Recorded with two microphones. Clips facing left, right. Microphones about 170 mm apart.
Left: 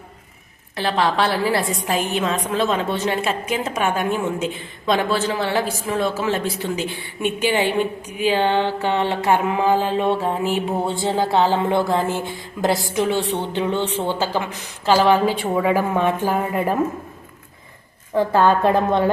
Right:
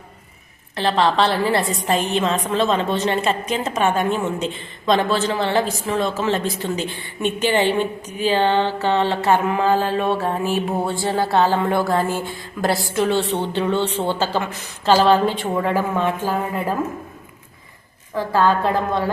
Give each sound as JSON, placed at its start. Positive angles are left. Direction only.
{"t": 0.8, "sound": "a woman's voice", "side_deg": 10}
{"t": 18.1, "sound": "a woman's voice", "side_deg": 20}